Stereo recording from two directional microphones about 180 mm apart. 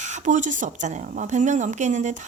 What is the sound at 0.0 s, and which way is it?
Speech, 40° right (ahead or behind).